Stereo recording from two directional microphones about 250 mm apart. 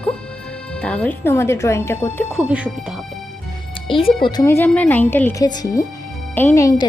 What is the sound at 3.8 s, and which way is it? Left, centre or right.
Speech, left.